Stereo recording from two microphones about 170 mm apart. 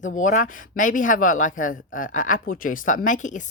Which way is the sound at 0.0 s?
50° left (ahead or behind).